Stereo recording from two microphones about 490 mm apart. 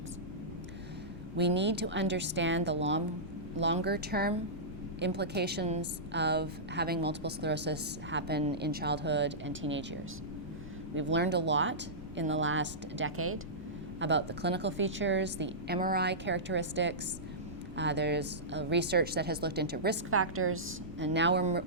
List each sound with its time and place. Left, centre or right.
1.4 s a woman's voice: right